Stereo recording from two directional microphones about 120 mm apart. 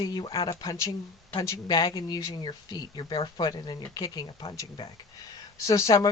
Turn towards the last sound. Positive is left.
turn(degrees=30)  # may be behind; listen again after turning